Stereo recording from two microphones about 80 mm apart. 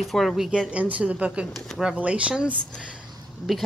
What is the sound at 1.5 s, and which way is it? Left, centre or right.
Speech, centre.